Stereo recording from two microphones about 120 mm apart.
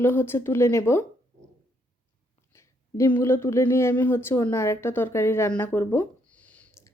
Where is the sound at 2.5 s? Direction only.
20° left (ahead or behind).